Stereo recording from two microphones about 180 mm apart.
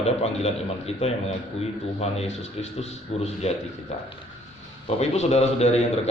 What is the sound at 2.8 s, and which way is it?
Speech, 35° left (ahead or behind).